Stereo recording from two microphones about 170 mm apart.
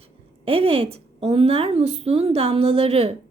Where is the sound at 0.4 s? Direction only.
35° right (ahead or behind).